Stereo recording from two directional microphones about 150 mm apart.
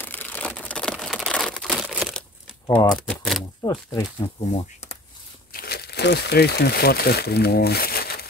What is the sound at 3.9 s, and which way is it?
Speech, 30° left (ahead or behind).